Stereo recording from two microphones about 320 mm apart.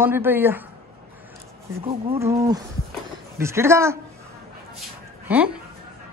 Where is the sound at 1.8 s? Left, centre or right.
Centre.